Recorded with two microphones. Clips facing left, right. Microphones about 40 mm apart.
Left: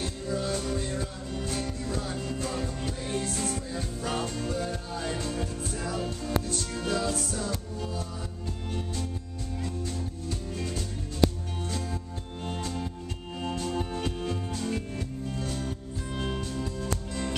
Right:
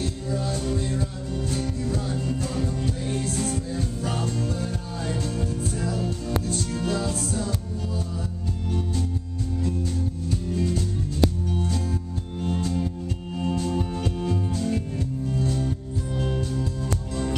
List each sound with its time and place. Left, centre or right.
0.3 s music: centre
9.6 s music: centre